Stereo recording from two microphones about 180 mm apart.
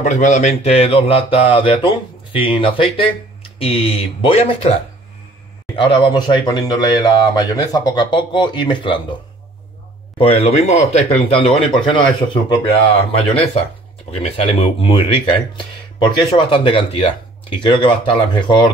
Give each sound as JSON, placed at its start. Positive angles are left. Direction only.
{"t": 0.0, "sound": "speech", "side_deg": 40}
{"t": 5.8, "sound": "speech", "side_deg": 25}
{"t": 10.1, "sound": "speech", "side_deg": 35}